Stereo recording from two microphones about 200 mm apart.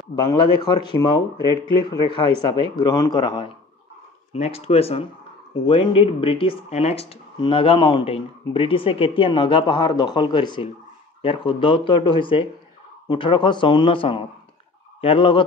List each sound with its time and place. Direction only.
0.1 s speech: 25° left (ahead or behind)